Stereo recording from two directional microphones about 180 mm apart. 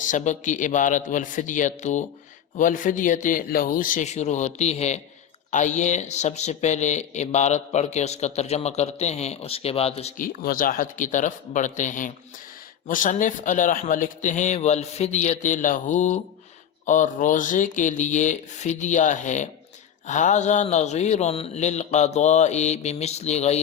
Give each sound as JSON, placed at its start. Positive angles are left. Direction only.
{"t": 0.0, "sound": "speech", "side_deg": 45}
{"t": 10.2, "sound": "speech", "side_deg": 50}